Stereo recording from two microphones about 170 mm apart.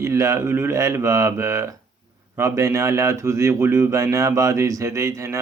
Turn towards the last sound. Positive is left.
turn(degrees=-15)  # may be behind; listen again after turning